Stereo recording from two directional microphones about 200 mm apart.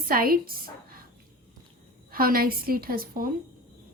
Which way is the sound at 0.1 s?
45° right (ahead or behind).